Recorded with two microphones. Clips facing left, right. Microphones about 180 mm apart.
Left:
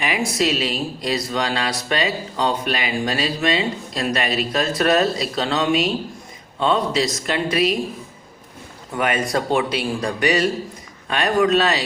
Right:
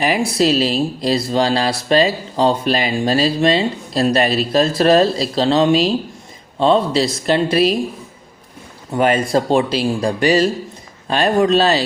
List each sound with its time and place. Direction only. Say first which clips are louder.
0.0 s speech: right 5 dB; 35° right (ahead or behind)
8.9 s speech: right 6 dB; 30° right (ahead or behind)